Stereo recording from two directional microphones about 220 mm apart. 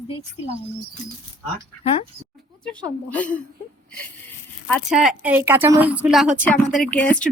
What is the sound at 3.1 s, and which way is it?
Speech, 5° left (ahead or behind).